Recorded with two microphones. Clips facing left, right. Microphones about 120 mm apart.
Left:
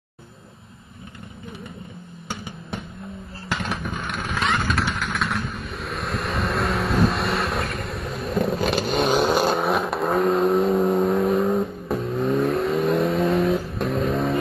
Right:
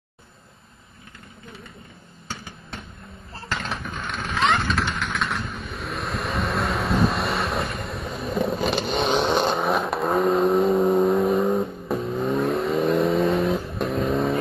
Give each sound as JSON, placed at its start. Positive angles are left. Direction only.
{"t": 2.2, "sound": "music", "side_deg": 15}
{"t": 3.4, "sound": "vehicle", "side_deg": 10}